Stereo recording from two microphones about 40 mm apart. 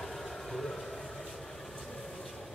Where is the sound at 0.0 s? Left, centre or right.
Centre.